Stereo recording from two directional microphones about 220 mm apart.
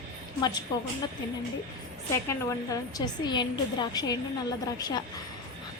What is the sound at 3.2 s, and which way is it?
A woman's voice, 20° left (ahead or behind).